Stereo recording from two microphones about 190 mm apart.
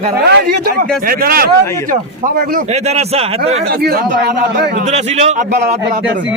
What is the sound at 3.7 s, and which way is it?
Speech, 50° right (ahead or behind).